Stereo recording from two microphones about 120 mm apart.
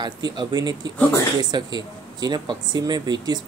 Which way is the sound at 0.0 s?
35° right (ahead or behind).